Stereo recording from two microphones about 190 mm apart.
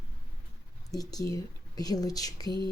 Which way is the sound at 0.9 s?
20° left (ahead or behind).